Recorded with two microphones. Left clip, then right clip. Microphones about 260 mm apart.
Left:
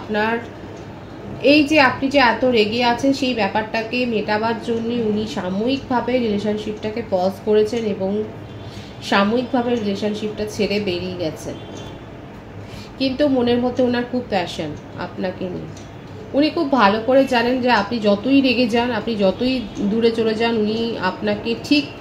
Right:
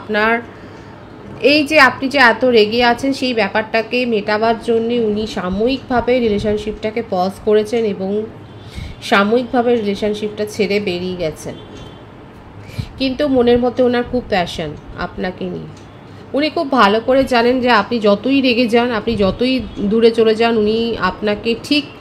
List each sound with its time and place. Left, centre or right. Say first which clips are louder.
0.1 s a woman's voice: right 5 dB; right
1.4 s a woman's voice: right 3 dB; right
9.0 s a woman's voice: right 4 dB; right
13.0 s a woman's voice: right 4 dB; right
16.3 s a woman's voice: right 3 dB; right